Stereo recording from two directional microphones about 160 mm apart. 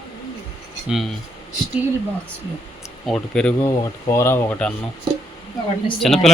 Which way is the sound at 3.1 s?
5° left (ahead or behind).